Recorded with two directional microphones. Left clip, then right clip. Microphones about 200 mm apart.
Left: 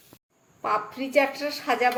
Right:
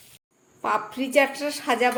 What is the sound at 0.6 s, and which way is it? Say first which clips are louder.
A woman's voice: right 1 dB; 20° right (ahead or behind).